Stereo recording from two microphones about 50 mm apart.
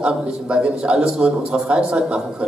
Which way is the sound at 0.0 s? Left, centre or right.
Centre.